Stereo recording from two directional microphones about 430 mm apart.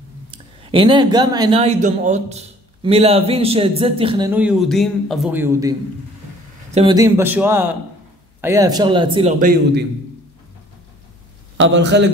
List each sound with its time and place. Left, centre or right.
0.3 s speech: centre
11.5 s a man's voice: right